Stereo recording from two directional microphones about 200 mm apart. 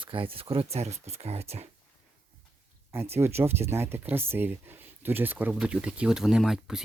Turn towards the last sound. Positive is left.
turn(degrees=0)  # may be behind; listen again after turning